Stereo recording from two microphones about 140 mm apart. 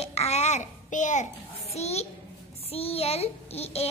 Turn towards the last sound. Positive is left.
turn(degrees=50)  # may be behind; listen again after turning